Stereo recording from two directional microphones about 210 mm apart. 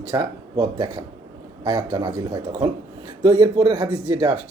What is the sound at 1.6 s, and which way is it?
Speech, 20° right (ahead or behind).